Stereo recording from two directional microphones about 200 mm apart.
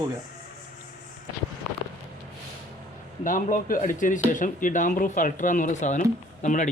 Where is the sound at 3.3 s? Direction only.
40° left (ahead or behind).